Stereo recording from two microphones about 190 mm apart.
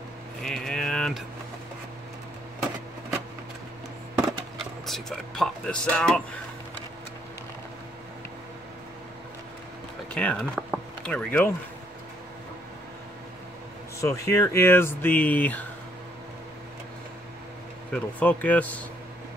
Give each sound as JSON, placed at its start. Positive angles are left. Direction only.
{"t": 0.4, "sound": "a sound", "side_deg": 5}
{"t": 4.1, "sound": "a sound", "side_deg": -20}
{"t": 4.6, "sound": "speech", "side_deg": 0}
{"t": 10.0, "sound": "speech", "side_deg": 5}
{"t": 14.0, "sound": "speech", "side_deg": 15}
{"t": 17.9, "sound": "speech", "side_deg": 5}